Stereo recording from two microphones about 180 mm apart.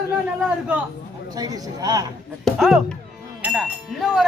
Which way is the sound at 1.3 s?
20° right (ahead or behind).